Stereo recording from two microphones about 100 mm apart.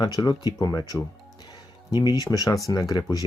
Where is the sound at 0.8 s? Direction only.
45° left (ahead or behind).